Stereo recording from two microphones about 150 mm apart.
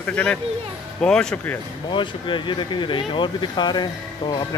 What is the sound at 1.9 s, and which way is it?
Speech, 35° left (ahead or behind).